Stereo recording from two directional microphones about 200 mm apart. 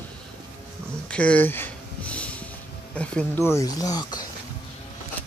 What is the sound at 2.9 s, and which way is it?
Speech, 5° left (ahead or behind).